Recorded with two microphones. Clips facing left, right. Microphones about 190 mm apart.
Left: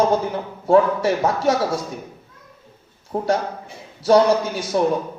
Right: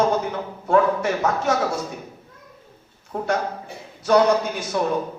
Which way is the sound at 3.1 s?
35° left (ahead or behind).